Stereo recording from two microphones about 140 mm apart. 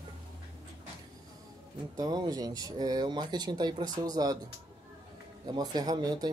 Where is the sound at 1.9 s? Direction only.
25° right (ahead or behind).